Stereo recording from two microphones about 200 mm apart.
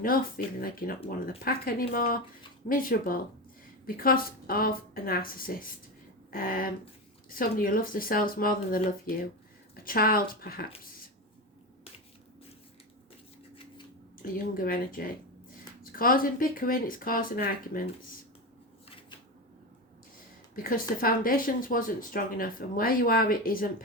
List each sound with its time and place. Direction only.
0.0 s speech: 45° left (ahead or behind)
14.2 s speech: 45° left (ahead or behind)
20.6 s speech: 45° left (ahead or behind)